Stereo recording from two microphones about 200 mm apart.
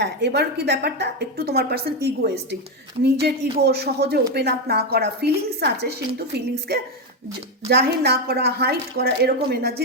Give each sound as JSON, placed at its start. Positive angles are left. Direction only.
{"t": 0.0, "sound": "a woman's voice", "side_deg": -55}